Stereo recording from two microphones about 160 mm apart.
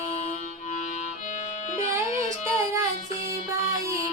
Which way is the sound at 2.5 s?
15° right (ahead or behind).